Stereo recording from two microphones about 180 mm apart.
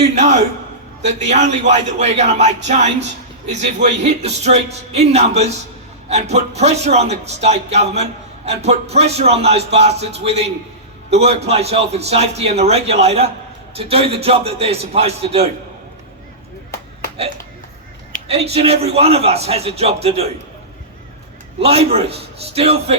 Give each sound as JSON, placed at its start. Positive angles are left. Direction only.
{"t": 0.0, "sound": "a man's voice", "side_deg": -40}
{"t": 18.3, "sound": "a man's voice", "side_deg": -35}
{"t": 21.6, "sound": "a man's voice", "side_deg": -35}